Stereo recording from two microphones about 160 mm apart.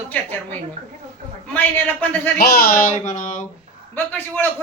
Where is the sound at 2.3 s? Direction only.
70° left (ahead or behind); by 3.4 s 55° left (ahead or behind).